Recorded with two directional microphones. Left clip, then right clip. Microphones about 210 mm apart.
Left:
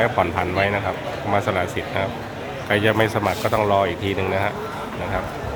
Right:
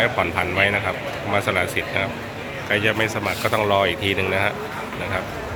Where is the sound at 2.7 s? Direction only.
25° left (ahead or behind).